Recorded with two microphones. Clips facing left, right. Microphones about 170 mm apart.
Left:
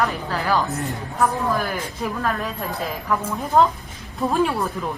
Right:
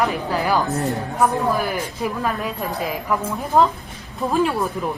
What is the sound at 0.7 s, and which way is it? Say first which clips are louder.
Speech: right 5 dB; 40° right (ahead or behind).